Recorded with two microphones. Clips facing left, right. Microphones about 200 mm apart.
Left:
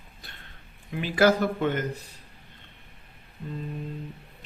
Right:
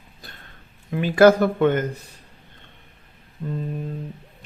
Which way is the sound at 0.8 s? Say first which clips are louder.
Right 7 dB; 50° right (ahead or behind).